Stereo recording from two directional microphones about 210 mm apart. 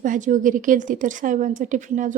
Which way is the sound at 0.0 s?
40° right (ahead or behind).